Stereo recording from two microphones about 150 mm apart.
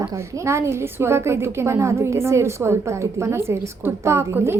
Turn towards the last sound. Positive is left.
turn(degrees=-15)  # may be behind; listen again after turning